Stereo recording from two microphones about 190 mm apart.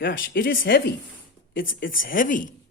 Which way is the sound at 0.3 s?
50° left (ahead or behind).